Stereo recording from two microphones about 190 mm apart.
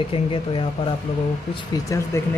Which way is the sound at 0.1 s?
25° left (ahead or behind).